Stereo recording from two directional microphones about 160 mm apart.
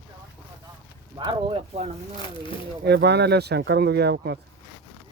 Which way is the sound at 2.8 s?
90° right.